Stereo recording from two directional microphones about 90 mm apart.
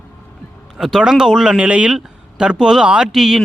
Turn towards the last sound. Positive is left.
turn(degrees=-5)  # may be behind; listen again after turning